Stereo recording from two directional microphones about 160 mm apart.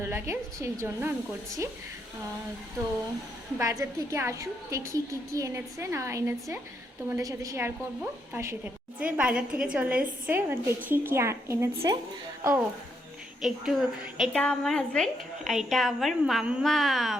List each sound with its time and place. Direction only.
0.0 s a woman's voice: 15° right (ahead or behind)
3.6 s a woman's voice: 20° right (ahead or behind)
13.4 s a woman's voice: centre (ahead or behind)